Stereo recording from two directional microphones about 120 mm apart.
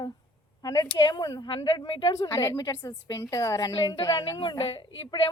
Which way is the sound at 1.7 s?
45° left (ahead or behind).